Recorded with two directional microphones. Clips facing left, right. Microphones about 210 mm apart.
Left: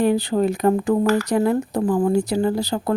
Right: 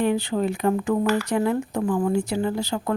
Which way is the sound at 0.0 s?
35° left (ahead or behind).